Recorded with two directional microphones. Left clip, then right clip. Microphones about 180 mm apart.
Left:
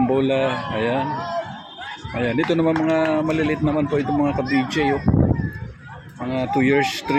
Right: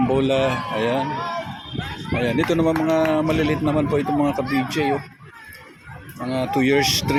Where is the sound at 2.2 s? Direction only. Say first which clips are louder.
Even; 5° left (ahead or behind).